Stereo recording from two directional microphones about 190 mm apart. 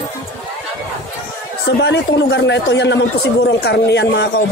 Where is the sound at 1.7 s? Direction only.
65° left (ahead or behind).